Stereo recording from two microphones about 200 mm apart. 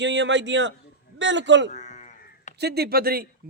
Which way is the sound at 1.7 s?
35° left (ahead or behind).